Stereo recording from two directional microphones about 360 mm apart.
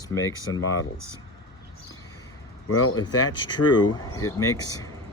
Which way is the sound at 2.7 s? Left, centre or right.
Left.